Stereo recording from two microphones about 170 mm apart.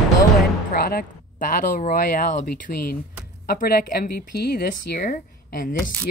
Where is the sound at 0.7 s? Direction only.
60° left (ahead or behind).